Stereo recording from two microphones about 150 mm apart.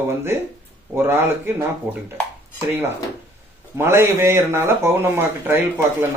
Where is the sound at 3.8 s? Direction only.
15° right (ahead or behind).